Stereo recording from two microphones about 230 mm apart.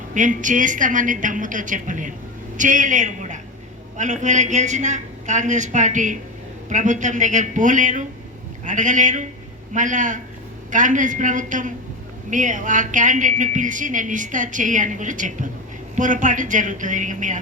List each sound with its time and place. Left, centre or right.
0.1 s a woman's voice: right